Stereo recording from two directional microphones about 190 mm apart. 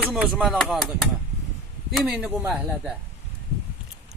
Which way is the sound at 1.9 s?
Centre (ahead or behind).